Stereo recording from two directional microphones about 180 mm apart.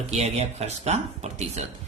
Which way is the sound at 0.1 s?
35° right (ahead or behind).